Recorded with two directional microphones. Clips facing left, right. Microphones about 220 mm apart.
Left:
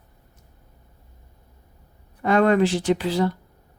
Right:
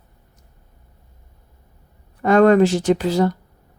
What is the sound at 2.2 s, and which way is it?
Speech, 45° right (ahead or behind).